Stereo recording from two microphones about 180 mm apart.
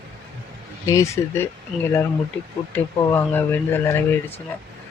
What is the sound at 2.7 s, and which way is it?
Speech, 10° left (ahead or behind).